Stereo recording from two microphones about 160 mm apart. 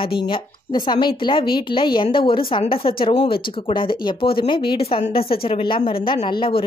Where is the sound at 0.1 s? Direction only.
30° left (ahead or behind).